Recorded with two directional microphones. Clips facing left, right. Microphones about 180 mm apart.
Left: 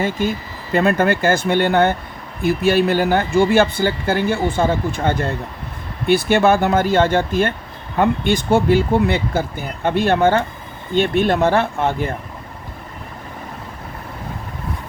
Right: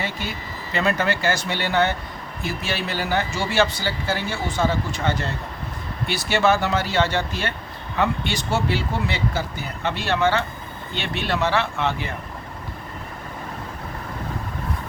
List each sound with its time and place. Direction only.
0.0 s speech: 50° left (ahead or behind)